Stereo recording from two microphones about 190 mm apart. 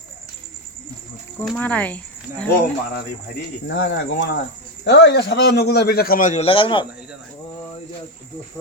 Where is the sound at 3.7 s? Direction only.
70° left (ahead or behind); by 6.8 s 25° left (ahead or behind).